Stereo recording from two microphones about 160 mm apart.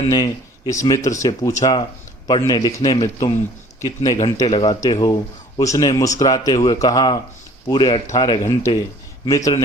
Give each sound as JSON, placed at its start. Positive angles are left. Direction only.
{"t": 0.1, "sound": "speech", "side_deg": 20}
{"t": 4.4, "sound": "speech", "side_deg": 35}